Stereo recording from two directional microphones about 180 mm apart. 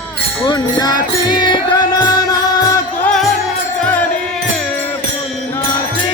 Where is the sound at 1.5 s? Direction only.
25° left (ahead or behind).